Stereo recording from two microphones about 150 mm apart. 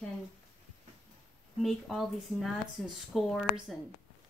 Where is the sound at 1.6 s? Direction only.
Centre (ahead or behind).